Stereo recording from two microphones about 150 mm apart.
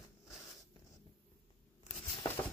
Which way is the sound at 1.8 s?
45° left (ahead or behind).